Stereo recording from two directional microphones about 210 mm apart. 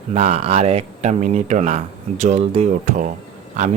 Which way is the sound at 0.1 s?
30° right (ahead or behind).